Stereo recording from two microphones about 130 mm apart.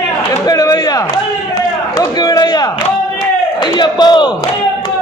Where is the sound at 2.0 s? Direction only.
30° left (ahead or behind).